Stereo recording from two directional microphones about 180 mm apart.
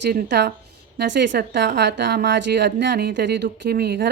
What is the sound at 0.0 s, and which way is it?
A woman's voice, 70° right (ahead or behind).